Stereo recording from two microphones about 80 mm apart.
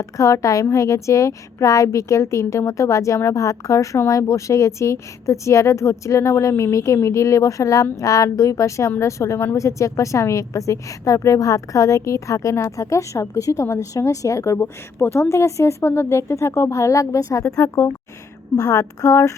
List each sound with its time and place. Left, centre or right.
0.0 s a woman's voice: left